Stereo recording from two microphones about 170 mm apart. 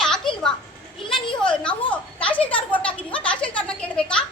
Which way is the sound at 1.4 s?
5° left (ahead or behind).